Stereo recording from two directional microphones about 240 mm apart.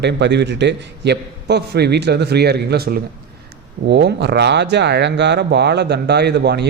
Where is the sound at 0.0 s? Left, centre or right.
Right.